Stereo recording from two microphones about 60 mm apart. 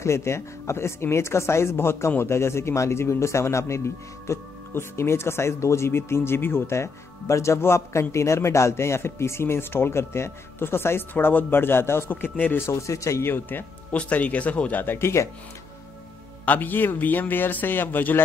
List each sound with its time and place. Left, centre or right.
0.0 s speech: left
12.1 s speech: left
12.5 s speech: left
13.2 s a man's voice: left
13.9 s speech: left
16.4 s a man's voice: left